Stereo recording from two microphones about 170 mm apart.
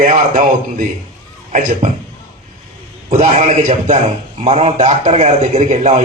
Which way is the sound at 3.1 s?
40° right (ahead or behind).